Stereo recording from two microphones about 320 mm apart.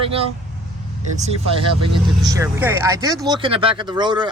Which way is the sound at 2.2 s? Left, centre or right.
Centre.